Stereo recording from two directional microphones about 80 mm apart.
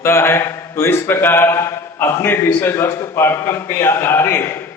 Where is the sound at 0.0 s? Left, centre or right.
Left.